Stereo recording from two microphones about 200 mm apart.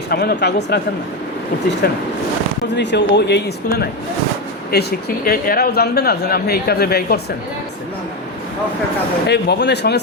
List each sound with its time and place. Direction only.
0.1 s speech: 55° left (ahead or behind)
1.8 s a man's voice: 50° left (ahead or behind)
9.2 s speech: 55° left (ahead or behind)